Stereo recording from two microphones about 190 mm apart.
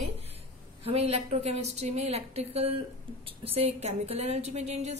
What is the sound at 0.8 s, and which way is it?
A woman's voice, 30° right (ahead or behind).